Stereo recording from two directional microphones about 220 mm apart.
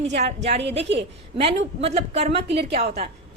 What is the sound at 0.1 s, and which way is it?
A woman's voice, 30° right (ahead or behind).